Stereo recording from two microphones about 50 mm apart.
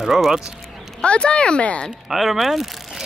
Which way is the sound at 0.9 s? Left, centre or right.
Centre.